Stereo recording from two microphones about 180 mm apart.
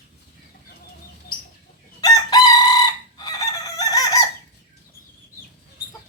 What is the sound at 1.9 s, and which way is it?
Chicken, 20° left (ahead or behind).